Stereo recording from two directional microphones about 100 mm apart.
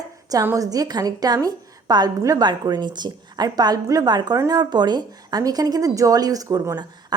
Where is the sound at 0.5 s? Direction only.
35° right (ahead or behind).